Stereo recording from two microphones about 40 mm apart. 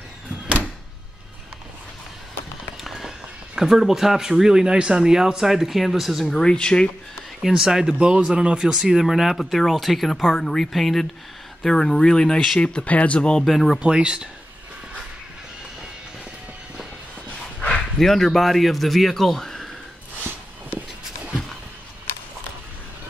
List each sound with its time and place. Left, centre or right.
2.8 s fireworks: centre
3.5 s speech: centre
6.4 s speech: left
7.5 s speech: centre
9.0 s a man's voice: centre
10.7 s a man's voice: centre
11.6 s speech: centre
13.4 s a man's voice: centre
13.7 s speech: right
17.9 s a man's voice: centre